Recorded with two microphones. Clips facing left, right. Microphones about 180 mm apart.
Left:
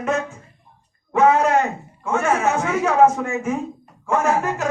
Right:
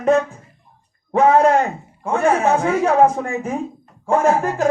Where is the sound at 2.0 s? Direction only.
35° right (ahead or behind).